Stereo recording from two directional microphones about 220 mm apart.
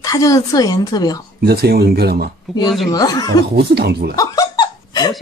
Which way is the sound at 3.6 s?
45° right (ahead or behind).